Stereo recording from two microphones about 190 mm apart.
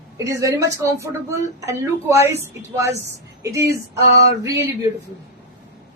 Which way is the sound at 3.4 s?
15° right (ahead or behind).